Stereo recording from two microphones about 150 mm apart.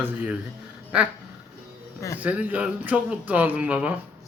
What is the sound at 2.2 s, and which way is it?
Speech, 10° right (ahead or behind).